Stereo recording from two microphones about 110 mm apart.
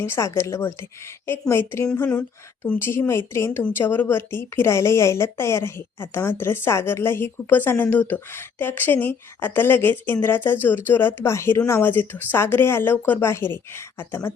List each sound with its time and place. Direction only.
0.0 s a woman's voice: 25° left (ahead or behind)